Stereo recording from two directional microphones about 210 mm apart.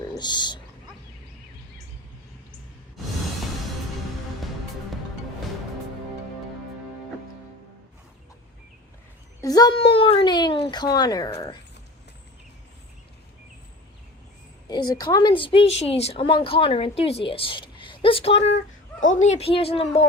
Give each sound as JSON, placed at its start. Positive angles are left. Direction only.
{"t": 0.1, "sound": "speech", "side_deg": 20}
{"t": 9.4, "sound": "a woman's voice", "side_deg": 20}
{"t": 14.7, "sound": "a woman's voice", "side_deg": 20}
{"t": 18.5, "sound": "a sound", "side_deg": 65}
{"t": 19.2, "sound": "a woman's voice", "side_deg": 30}